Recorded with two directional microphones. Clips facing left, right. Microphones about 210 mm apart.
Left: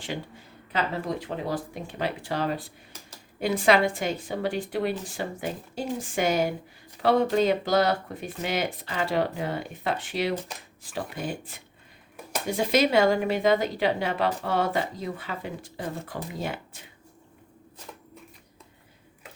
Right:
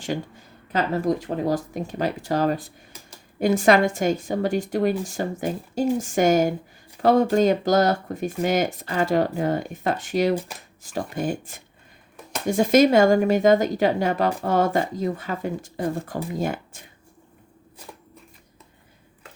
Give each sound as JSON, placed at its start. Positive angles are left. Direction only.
{"t": 0.7, "sound": "speech", "side_deg": -45}